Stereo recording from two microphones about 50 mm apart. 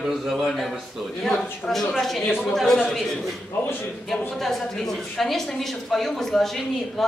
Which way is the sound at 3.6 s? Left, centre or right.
Left.